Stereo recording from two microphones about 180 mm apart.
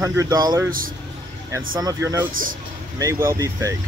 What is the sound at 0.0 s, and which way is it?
Speech, 15° right (ahead or behind).